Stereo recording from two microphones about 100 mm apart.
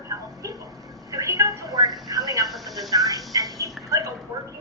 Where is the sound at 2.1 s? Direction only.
35° right (ahead or behind).